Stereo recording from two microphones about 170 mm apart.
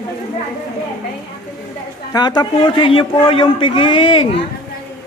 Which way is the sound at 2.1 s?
25° left (ahead or behind).